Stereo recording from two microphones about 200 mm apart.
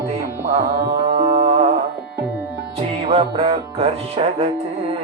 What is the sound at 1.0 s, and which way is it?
Music, 30° right (ahead or behind).